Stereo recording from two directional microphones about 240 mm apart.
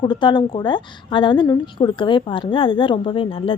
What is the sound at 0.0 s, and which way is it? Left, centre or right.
Speech, centre.